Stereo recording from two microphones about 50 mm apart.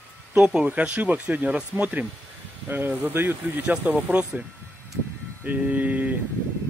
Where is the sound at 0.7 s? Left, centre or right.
Right.